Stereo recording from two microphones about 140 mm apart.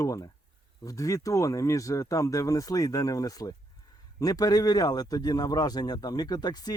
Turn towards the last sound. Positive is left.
turn(degrees=30)  # may be behind; listen again after turning